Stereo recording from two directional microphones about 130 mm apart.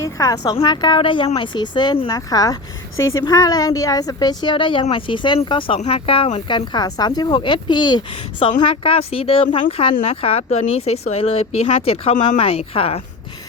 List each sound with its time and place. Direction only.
0.0 s a woman's voice: 25° left (ahead or behind); by 6.4 s 50° left (ahead or behind)
6.5 s a woman's voice: 30° left (ahead or behind); by 13.0 s 50° left (ahead or behind)